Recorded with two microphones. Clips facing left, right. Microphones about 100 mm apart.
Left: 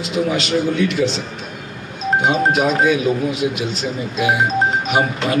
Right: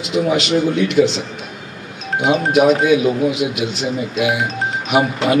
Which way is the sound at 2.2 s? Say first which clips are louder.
Right 5 dB; 40° left (ahead or behind).